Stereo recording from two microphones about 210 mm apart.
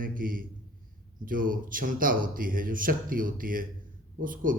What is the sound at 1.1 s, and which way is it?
Speech, 40° right (ahead or behind).